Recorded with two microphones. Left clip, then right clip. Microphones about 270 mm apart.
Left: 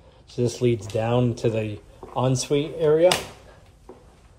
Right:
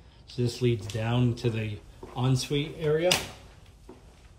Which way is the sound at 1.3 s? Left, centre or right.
Centre.